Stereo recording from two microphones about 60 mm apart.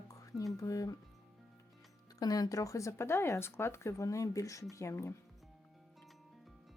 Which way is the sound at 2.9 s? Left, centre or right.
Left.